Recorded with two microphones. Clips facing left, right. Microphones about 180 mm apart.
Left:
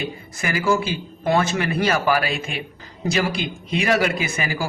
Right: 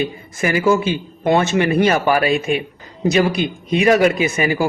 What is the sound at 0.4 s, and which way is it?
Speech, 25° right (ahead or behind).